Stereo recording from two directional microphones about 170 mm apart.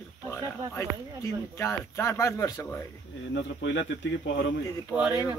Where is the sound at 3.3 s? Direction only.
90° left.